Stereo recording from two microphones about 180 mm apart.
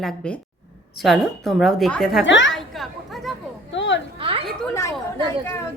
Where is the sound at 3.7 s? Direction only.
90° left.